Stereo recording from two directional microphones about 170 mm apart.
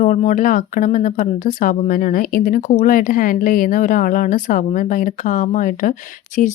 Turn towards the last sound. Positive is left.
turn(degrees=50)  # may be behind; listen again after turning